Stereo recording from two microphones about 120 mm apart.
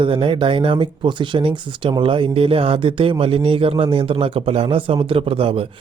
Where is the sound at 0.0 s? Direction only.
45° right (ahead or behind).